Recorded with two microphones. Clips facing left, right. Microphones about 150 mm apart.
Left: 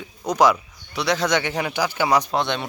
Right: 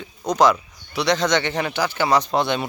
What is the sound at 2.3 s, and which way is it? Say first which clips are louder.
Speech: right 2 dB; centre (ahead or behind).